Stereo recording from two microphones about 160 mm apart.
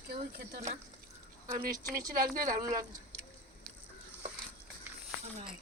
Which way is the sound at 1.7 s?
20° right (ahead or behind).